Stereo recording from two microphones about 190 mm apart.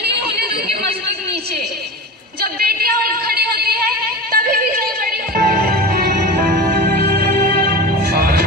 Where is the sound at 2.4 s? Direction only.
55° right (ahead or behind).